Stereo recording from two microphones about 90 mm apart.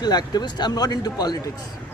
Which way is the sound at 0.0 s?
50° left (ahead or behind).